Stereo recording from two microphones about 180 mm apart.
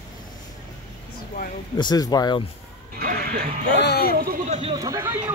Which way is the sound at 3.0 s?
55° right (ahead or behind).